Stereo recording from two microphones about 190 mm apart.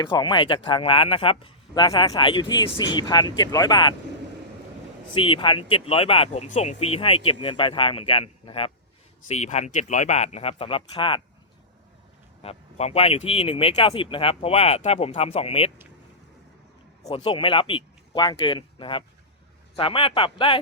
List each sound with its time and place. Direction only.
0.0 s speech: 25° left (ahead or behind)
5.1 s speech: 25° left (ahead or behind)
12.4 s speech: 30° left (ahead or behind)
17.1 s speech: 30° left (ahead or behind)